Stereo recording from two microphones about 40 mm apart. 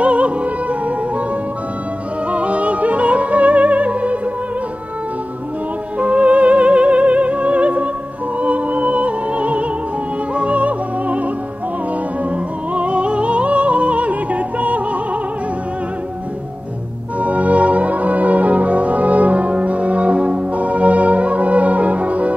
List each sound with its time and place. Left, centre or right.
0.0 s music: right
2.3 s opera: right
5.9 s music: right
12.7 s music: right
17.2 s music: right